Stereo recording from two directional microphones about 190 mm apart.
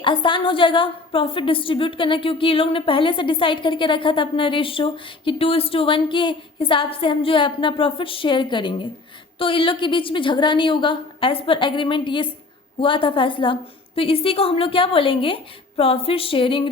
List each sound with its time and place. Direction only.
0.0 s a woman's voice: 25° left (ahead or behind)